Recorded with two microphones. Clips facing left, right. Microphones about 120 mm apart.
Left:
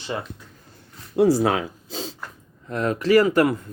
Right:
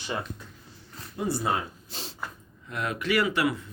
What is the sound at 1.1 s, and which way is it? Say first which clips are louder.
Speech: left 10 dB; 90° left.